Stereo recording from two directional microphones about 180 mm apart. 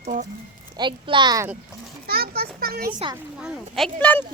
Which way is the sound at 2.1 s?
60° right (ahead or behind).